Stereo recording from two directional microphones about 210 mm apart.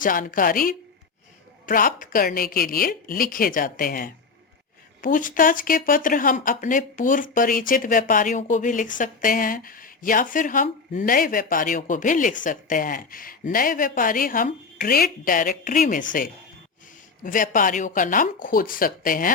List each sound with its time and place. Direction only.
0.0 s a woman's voice: 40° left (ahead or behind)